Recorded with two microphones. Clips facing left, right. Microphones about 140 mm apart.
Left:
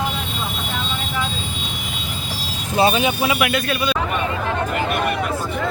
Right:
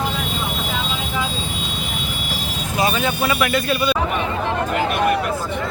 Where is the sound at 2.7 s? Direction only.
30° left (ahead or behind).